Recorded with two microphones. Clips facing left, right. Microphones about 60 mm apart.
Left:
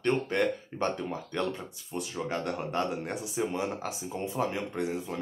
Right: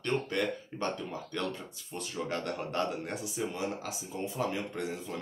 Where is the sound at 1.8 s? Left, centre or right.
Centre.